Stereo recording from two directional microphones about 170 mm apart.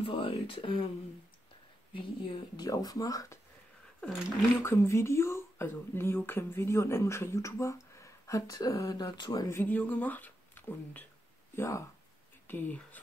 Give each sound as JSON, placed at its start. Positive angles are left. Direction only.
{"t": 0.0, "sound": "speech", "side_deg": 30}
{"t": 2.0, "sound": "speech", "side_deg": 25}
{"t": 4.6, "sound": "speech", "side_deg": 15}